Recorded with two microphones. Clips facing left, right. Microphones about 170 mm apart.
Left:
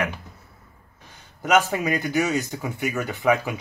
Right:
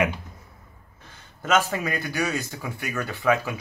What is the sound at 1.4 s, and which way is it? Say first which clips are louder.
Speech: left 3 dB; 15° left (ahead or behind).